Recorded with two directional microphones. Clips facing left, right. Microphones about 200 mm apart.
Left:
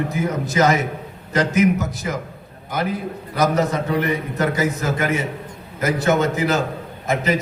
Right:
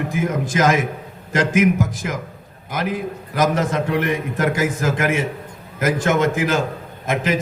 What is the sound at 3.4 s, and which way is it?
A man's voice, 90° right.